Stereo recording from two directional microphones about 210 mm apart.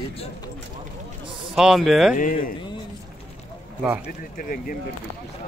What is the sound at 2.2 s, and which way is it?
Speech, 40° left (ahead or behind).